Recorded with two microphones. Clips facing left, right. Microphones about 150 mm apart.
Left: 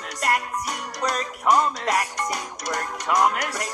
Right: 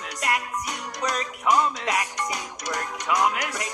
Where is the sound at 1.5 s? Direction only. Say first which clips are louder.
Left 2 dB; 45° left (ahead or behind).